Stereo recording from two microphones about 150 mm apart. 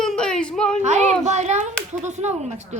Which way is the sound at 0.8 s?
50° right (ahead or behind).